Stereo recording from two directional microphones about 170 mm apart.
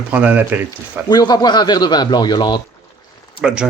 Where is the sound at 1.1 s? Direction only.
25° left (ahead or behind).